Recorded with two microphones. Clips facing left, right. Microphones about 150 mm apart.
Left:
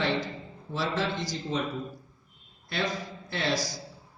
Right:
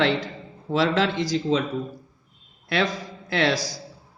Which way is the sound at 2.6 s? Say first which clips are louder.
Right 6 dB; 80° right.